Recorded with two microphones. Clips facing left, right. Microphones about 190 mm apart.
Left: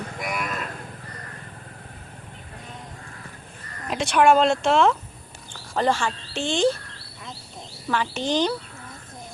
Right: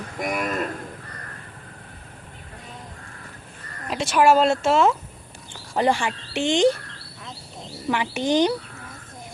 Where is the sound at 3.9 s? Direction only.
Centre (ahead or behind).